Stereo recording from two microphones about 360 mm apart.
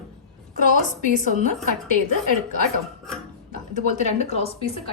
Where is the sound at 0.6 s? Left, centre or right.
Left.